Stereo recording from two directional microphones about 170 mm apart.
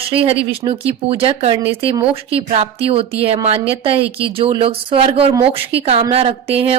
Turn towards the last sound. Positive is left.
turn(degrees=-35)  # may be behind; listen again after turning